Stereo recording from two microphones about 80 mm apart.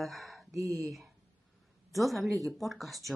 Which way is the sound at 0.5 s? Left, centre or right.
Right.